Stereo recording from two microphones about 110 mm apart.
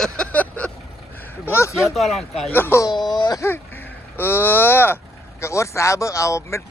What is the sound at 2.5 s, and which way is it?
Speech, 20° left (ahead or behind).